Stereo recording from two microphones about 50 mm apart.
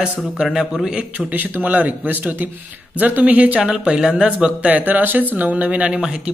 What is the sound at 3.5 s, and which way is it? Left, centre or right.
Speech, centre.